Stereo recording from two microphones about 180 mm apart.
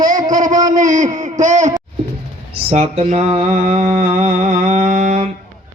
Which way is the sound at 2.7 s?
40° right (ahead or behind).